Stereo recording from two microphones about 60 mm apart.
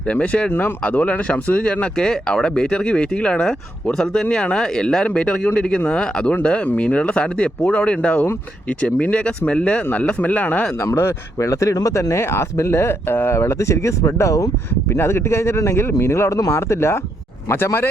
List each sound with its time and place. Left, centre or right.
0.1 s speech: left
10.8 s speech: left
14.9 s speech: left